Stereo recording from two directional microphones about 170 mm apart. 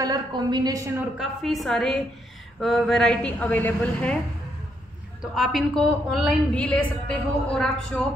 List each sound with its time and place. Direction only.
0.0 s a woman's voice: 25° right (ahead or behind)
1.1 s a woman's voice: centre (ahead or behind)
5.2 s a woman's voice: centre (ahead or behind)